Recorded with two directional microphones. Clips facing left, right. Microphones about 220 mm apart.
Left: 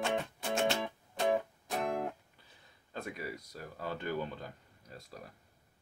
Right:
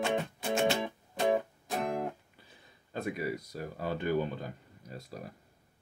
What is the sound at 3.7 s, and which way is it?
Speech, 10° right (ahead or behind).